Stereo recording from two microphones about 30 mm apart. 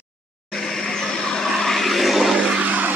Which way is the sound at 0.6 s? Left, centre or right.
Centre.